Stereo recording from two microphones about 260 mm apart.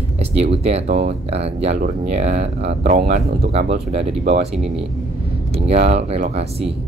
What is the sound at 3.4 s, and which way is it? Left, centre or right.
Speech, right.